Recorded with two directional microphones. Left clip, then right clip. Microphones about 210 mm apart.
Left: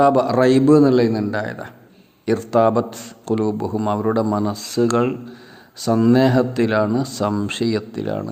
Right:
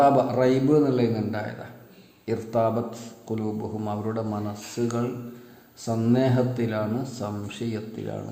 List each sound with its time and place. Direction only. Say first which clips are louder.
0.0 s a man's voice: left 5 dB; 40° left (ahead or behind)